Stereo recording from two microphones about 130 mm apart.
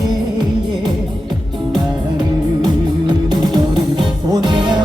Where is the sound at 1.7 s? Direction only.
35° right (ahead or behind).